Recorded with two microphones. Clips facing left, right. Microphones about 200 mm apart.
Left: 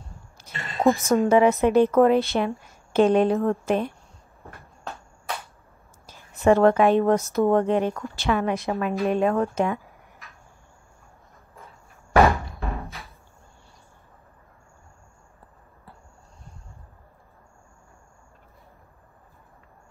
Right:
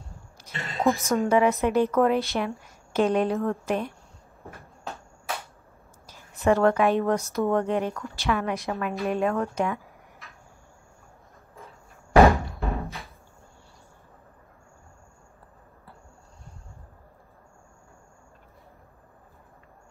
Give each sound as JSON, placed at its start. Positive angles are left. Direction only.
{"t": 0.4, "sound": "a sound", "side_deg": 25}
{"t": 1.2, "sound": "a woman's voice", "side_deg": 30}
{"t": 6.4, "sound": "speech", "side_deg": 25}
{"t": 12.6, "sound": "music", "side_deg": 0}